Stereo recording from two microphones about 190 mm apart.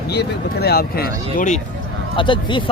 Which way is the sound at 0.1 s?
60° left (ahead or behind).